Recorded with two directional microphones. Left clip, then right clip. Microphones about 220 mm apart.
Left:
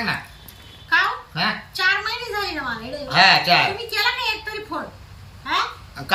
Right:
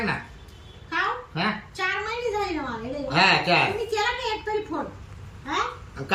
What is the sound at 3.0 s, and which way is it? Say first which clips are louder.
Speech: left 5 dB; 10° right (ahead or behind).